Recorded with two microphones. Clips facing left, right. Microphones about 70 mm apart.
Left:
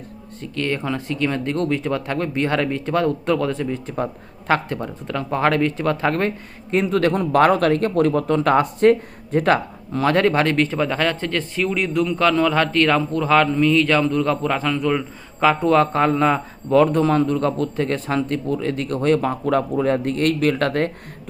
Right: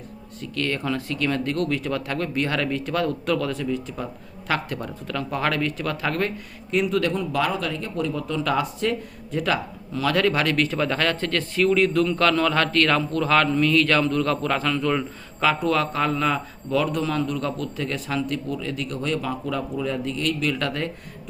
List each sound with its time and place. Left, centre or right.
0.4 s speech: left
10.8 s a man's voice: centre; by 20.9 s left